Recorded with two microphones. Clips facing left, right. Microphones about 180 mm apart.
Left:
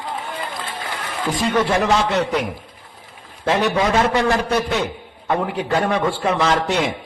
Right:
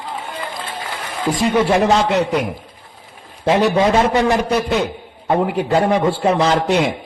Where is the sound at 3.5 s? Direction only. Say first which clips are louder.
Right 4 dB; 20° right (ahead or behind).